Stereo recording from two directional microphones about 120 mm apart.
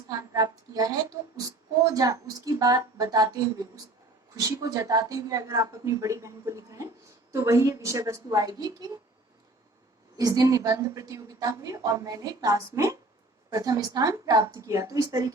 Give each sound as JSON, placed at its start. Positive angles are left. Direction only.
{"t": 0.1, "sound": "a woman's voice", "side_deg": -30}
{"t": 10.2, "sound": "a woman's voice", "side_deg": -30}